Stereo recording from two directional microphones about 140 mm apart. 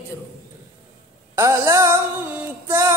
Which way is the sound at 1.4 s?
20° right (ahead or behind).